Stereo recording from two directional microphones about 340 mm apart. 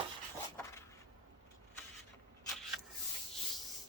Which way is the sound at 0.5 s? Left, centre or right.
Centre.